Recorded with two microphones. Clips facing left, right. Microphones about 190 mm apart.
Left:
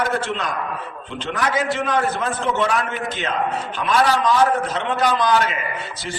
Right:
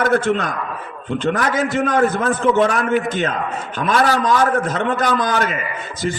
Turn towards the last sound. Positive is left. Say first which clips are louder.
# even
turn(degrees=-45)  # may be behind; listen again after turning